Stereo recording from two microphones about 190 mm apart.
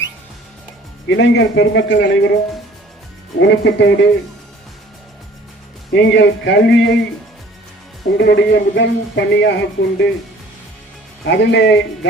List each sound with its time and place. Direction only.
1.0 s speech: 65° left (ahead or behind)
3.4 s speech: 60° left (ahead or behind)
5.9 s speech: 70° left (ahead or behind)
8.2 s speech: 60° left (ahead or behind)
11.3 s speech: 65° left (ahead or behind)